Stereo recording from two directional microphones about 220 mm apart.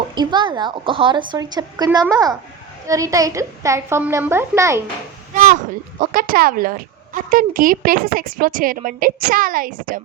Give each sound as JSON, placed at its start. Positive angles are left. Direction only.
{"t": 0.1, "sound": "a woman's voice", "side_deg": -20}
{"t": 5.3, "sound": "a sound", "side_deg": -35}
{"t": 6.0, "sound": "speech", "side_deg": -40}